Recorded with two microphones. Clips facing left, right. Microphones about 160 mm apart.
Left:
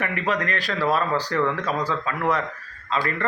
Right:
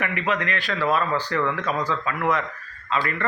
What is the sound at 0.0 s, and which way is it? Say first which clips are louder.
A man's voice: even; 35° left (ahead or behind).